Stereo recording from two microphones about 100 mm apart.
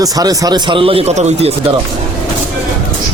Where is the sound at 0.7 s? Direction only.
65° right (ahead or behind); by 1.5 s 90° right.